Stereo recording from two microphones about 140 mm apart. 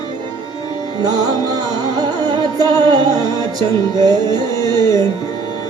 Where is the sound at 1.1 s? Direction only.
30° right (ahead or behind).